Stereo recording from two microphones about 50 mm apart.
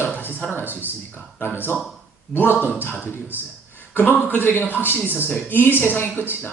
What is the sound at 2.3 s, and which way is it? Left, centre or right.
Speech, left.